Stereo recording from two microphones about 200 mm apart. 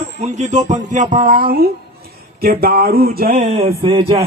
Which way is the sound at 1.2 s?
45° right (ahead or behind).